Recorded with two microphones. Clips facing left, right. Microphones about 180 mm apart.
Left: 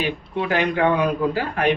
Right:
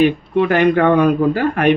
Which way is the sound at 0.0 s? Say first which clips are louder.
Right 10 dB; 55° right (ahead or behind).